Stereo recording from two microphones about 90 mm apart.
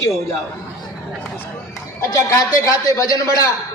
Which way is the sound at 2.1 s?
35° left (ahead or behind).